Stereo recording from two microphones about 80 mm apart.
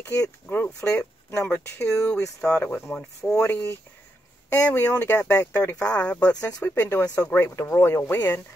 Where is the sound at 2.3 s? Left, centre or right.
Centre.